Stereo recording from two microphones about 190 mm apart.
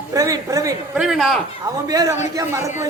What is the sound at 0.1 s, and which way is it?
Speech, 20° right (ahead or behind).